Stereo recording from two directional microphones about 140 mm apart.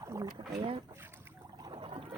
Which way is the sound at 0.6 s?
45° right (ahead or behind).